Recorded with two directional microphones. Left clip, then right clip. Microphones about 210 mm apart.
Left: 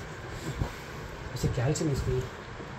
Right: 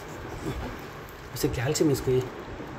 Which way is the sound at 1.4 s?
55° right (ahead or behind).